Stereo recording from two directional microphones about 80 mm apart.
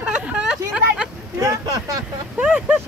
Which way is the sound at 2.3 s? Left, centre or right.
Centre.